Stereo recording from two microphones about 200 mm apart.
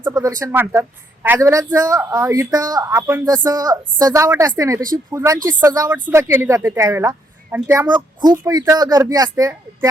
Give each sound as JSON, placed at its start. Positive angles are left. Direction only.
{"t": 0.0, "sound": "speech", "side_deg": -15}